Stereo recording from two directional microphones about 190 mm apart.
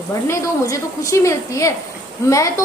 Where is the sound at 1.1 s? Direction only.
15° left (ahead or behind).